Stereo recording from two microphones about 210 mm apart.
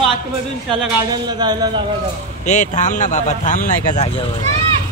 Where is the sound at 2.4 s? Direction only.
35° left (ahead or behind).